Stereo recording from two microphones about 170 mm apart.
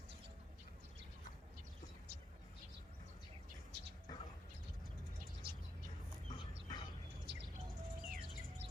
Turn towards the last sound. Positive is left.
turn(degrees=-80)